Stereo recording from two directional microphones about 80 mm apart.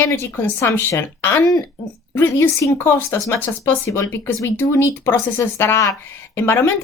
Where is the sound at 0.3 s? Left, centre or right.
Left.